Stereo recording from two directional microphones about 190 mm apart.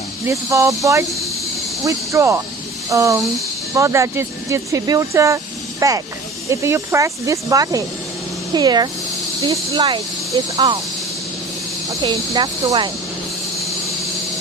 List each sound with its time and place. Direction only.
0.3 s speech: 15° right (ahead or behind)
12.0 s speech: 25° right (ahead or behind)